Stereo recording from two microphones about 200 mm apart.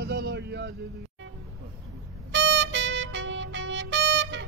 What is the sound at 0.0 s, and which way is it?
Vehicle, 55° right (ahead or behind).